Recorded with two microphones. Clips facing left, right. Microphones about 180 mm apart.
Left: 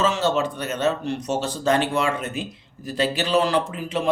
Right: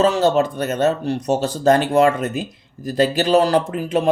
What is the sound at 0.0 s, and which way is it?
Speech, 40° right (ahead or behind).